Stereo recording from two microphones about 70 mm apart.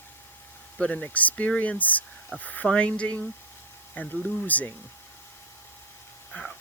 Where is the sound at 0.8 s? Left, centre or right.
Centre.